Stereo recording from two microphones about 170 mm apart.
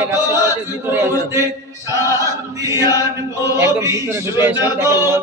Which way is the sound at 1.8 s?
20° right (ahead or behind).